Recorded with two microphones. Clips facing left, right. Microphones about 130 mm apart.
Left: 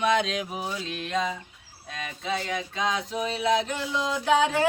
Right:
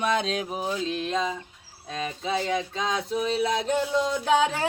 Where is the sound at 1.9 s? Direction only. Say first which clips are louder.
Right 2 dB; 30° right (ahead or behind).